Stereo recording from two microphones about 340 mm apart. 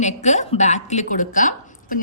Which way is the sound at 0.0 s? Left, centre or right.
Left.